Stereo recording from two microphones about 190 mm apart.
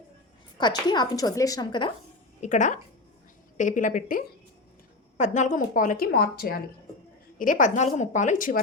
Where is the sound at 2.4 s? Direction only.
40° left (ahead or behind).